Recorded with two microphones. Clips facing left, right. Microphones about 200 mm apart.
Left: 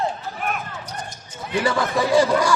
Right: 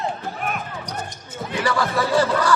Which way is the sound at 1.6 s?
20° left (ahead or behind).